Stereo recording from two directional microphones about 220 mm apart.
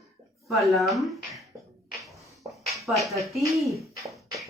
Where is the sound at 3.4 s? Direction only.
15° right (ahead or behind).